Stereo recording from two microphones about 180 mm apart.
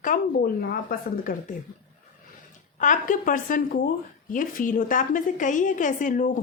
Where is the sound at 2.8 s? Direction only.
45° left (ahead or behind).